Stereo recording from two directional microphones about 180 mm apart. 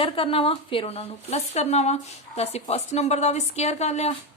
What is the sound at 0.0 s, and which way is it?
A woman's voice, 30° left (ahead or behind).